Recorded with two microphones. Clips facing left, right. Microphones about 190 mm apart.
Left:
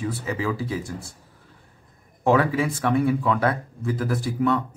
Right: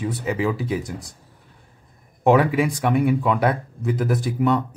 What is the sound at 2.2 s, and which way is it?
Speech, 15° right (ahead or behind).